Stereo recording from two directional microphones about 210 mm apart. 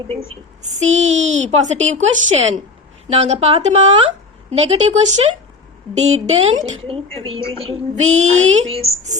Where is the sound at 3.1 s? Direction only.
30° right (ahead or behind).